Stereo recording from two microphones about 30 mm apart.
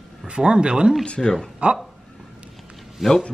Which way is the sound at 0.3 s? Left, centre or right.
Right.